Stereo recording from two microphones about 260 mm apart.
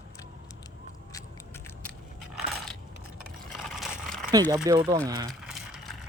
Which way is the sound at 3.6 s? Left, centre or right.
Centre.